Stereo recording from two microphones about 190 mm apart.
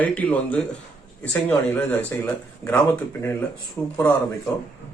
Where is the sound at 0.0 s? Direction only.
10° left (ahead or behind).